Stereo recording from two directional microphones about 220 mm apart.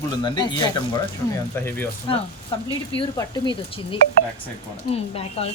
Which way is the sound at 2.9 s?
20° left (ahead or behind).